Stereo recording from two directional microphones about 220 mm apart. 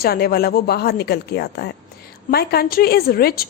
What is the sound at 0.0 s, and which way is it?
Speech, 45° left (ahead or behind).